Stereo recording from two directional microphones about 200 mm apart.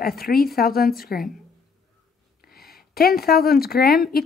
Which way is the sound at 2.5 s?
50° left (ahead or behind).